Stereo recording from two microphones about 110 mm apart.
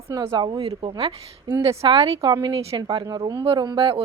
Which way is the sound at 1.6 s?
50° right (ahead or behind).